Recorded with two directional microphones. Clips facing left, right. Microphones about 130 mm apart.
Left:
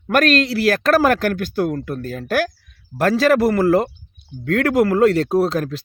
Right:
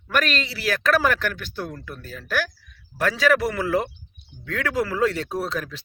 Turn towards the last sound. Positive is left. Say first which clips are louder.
# left 10 dB
turn(degrees=45)  # may be behind; listen again after turning